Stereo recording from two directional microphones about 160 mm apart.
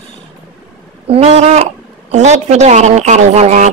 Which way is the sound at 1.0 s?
40° right (ahead or behind).